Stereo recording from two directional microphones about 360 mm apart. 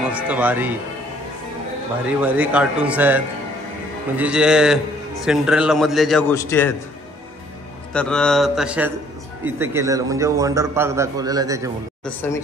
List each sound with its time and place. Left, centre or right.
0.1 s a man's voice: centre
2.0 s a man's voice: centre
7.9 s a man's voice: centre
12.0 s a man's voice: centre